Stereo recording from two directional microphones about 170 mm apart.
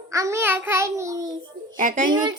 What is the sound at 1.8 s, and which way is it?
Speech, 50° right (ahead or behind).